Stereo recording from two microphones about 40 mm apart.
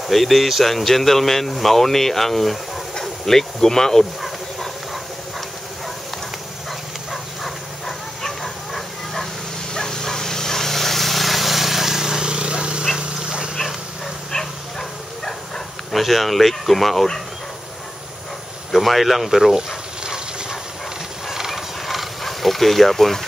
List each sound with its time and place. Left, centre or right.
0.1 s speech: centre
4.0 s dog: centre
7.4 s bow-wow: centre
9.8 s vehicle: centre; by 12.8 s right
13.0 s dog: right
14.3 s dog: centre
18.7 s speech: centre
20.0 s dog: centre
21.3 s a sound: centre